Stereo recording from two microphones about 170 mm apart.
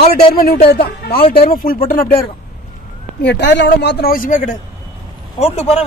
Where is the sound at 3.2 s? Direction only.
90° left; by 4.6 s 50° left (ahead or behind).